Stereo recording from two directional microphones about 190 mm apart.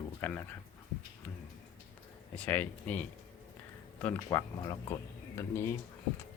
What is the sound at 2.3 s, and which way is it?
Speech, 10° left (ahead or behind).